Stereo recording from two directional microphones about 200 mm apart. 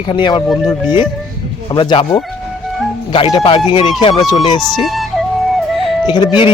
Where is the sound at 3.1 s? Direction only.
25° left (ahead or behind).